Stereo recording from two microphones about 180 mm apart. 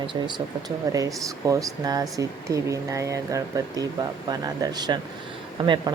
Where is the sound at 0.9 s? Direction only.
20° right (ahead or behind).